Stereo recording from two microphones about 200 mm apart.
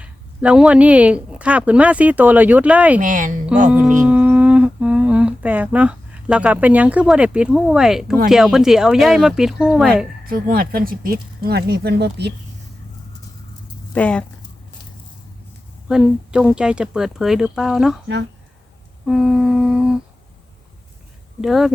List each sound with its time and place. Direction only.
0.0 s speech: 5° right (ahead or behind)
3.0 s a woman's voice: 40° right (ahead or behind)
3.7 s speech: 5° right (ahead or behind)
10.2 s speech: 45° right (ahead or behind)
13.9 s speech: 5° left (ahead or behind)
15.9 s speech: 5° right (ahead or behind)
19.0 s speech: centre (ahead or behind)
21.4 s speech: centre (ahead or behind)